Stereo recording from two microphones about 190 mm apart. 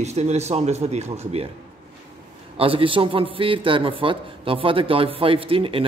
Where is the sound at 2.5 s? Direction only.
30° right (ahead or behind).